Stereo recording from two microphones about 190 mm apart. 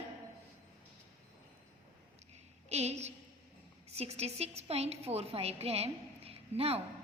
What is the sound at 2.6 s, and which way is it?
A woman's voice, 35° right (ahead or behind).